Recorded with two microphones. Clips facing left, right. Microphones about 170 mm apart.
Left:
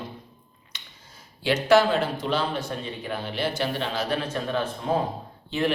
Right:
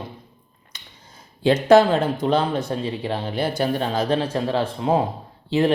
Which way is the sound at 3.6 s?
45° right (ahead or behind).